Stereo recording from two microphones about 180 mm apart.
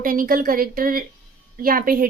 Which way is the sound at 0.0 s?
50° right (ahead or behind).